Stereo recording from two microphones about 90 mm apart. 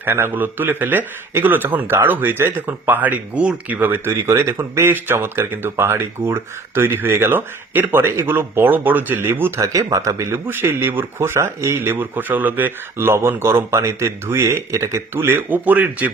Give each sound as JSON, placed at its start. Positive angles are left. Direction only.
{"t": 0.0, "sound": "speech", "side_deg": -25}
{"t": 9.6, "sound": "speech", "side_deg": -40}